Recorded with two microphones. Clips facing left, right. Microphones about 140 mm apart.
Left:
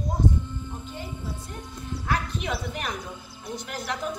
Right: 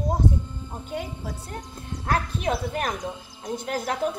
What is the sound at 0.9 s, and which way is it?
Speech, 75° right (ahead or behind).